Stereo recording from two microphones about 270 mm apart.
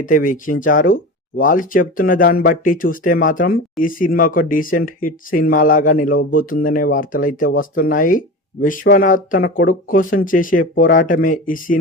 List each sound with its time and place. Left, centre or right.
0.0 s speech: left